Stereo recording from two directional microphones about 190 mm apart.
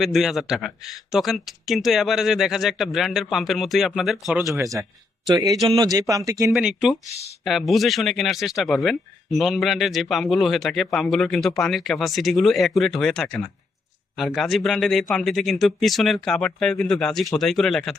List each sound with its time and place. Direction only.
0.0 s a man's voice: centre (ahead or behind); by 6.5 s 20° right (ahead or behind)
6.5 s a man's voice: 5° right (ahead or behind)